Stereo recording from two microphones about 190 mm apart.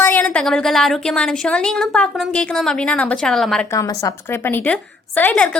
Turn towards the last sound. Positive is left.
turn(degrees=5)  # may be behind; listen again after turning